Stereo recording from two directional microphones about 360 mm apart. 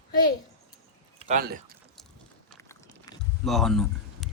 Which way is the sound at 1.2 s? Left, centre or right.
Right.